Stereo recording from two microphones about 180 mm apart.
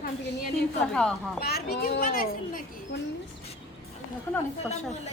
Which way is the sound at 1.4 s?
60° left (ahead or behind).